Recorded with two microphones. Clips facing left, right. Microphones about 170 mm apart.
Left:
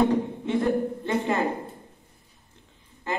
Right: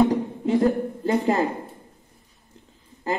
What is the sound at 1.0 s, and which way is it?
Speech, 35° right (ahead or behind).